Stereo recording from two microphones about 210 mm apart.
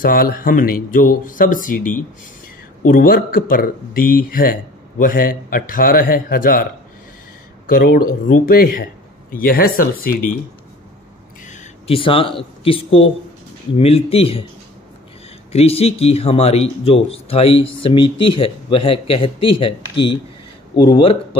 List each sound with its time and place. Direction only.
0.0 s speech: 45° left (ahead or behind)
11.4 s speech: 30° left (ahead or behind)
15.5 s speech: 30° left (ahead or behind)